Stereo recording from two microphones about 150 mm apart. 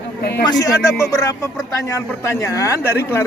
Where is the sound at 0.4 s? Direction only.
25° left (ahead or behind).